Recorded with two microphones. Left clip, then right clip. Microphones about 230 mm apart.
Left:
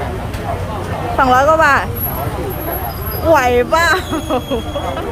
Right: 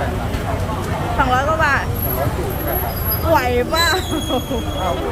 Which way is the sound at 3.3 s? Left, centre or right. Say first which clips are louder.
Left 5 dB; centre.